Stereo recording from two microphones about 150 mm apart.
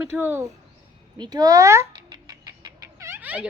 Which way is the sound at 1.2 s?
25° right (ahead or behind).